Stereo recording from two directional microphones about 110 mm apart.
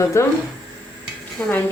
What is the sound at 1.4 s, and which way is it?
Stir, 10° left (ahead or behind).